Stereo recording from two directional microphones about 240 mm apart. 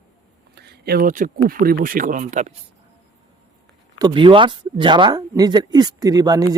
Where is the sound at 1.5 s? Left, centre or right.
Right.